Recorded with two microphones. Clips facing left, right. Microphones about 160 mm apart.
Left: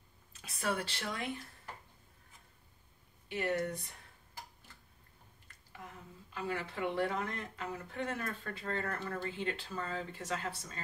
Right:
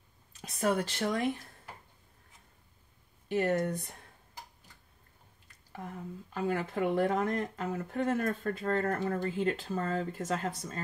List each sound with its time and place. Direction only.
0.3 s speech: 40° right (ahead or behind)
3.3 s speech: 50° right (ahead or behind)
5.8 s speech: 50° right (ahead or behind)